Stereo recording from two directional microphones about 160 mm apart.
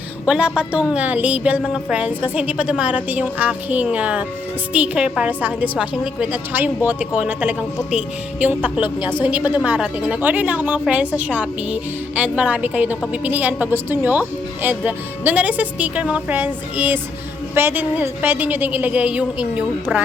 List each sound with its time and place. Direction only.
0.3 s speech: 5° right (ahead or behind)